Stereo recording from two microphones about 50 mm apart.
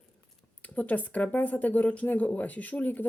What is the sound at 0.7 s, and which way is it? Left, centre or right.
Speech, left.